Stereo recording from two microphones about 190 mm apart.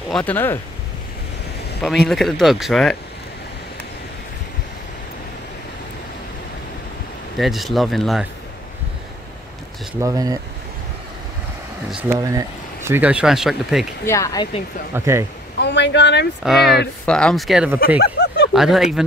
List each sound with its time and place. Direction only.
0.1 s speech: 10° left (ahead or behind)
2.0 s speech: centre (ahead or behind)
7.3 s speech: centre (ahead or behind)
9.9 s speech: 15° right (ahead or behind)
11.9 s speech: 10° right (ahead or behind)
14.0 s speech: 15° left (ahead or behind)
15.6 s speech: 65° left (ahead or behind)
16.4 s speech: centre (ahead or behind)
17.7 s a sound: 50° left (ahead or behind)
18.5 s speech: centre (ahead or behind)